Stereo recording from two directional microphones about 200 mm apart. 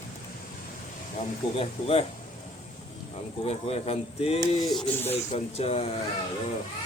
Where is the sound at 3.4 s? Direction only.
30° left (ahead or behind).